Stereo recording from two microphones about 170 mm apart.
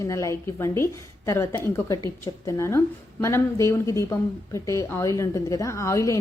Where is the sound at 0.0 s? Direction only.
15° left (ahead or behind).